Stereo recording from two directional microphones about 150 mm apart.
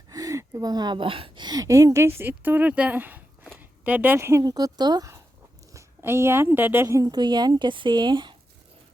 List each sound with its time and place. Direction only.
0.1 s a woman's voice: 25° right (ahead or behind)